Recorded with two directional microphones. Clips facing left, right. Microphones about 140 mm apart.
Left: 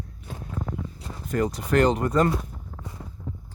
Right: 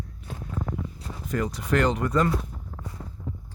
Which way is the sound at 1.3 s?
40° left (ahead or behind).